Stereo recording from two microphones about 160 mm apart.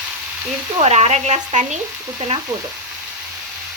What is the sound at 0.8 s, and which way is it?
A woman's voice, 45° right (ahead or behind).